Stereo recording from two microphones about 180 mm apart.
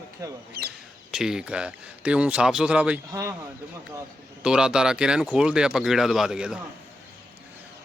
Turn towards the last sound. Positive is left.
turn(degrees=-5)  # may be behind; listen again after turning